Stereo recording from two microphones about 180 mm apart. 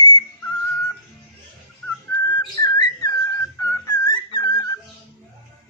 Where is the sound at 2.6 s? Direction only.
20° left (ahead or behind).